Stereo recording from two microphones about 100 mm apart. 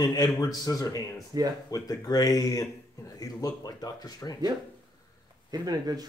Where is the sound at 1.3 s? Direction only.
40° right (ahead or behind).